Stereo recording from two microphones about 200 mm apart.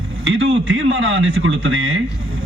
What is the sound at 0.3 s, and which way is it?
A woman's voice, 70° right (ahead or behind).